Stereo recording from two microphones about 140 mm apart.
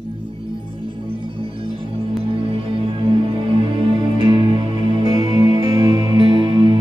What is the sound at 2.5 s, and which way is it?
Music, 40° right (ahead or behind).